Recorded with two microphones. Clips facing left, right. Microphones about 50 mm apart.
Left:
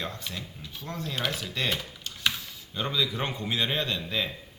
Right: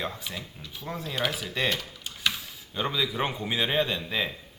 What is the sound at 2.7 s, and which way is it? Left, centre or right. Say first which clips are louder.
Speech: right 1 dB; centre.